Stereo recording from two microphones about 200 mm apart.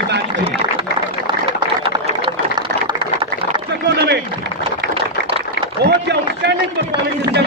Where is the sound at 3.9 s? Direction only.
60° right (ahead or behind).